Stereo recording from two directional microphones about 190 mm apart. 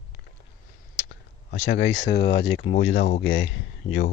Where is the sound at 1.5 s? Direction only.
75° left (ahead or behind).